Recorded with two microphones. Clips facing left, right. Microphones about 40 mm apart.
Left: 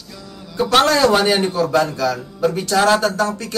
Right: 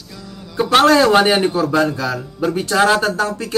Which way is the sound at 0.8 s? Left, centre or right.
Centre.